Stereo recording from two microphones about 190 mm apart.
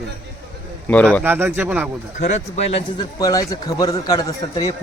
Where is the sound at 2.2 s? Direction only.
35° left (ahead or behind); by 4.7 s 20° left (ahead or behind).